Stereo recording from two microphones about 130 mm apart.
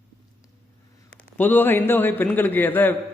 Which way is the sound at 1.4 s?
15° left (ahead or behind).